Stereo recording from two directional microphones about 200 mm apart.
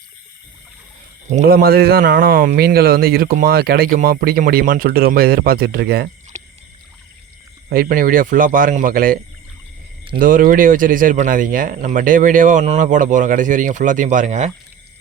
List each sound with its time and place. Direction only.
1.3 s speech: 40° right (ahead or behind)
6.3 s rowboat: 35° right (ahead or behind)
7.7 s speech: 45° right (ahead or behind)
10.2 s speech: 45° right (ahead or behind)